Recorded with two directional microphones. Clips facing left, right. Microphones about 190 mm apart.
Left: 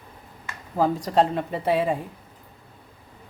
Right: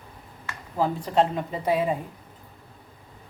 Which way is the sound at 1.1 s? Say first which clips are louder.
Left 1 dB; 30° left (ahead or behind).